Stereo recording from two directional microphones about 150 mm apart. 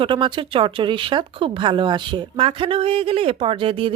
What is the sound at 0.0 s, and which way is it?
Speech, 30° right (ahead or behind).